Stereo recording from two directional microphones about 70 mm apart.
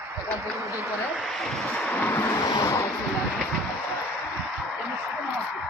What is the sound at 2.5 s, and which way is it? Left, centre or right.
Vehicle, left.